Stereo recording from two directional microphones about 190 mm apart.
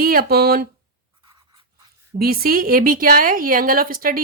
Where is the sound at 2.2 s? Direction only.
50° right (ahead or behind).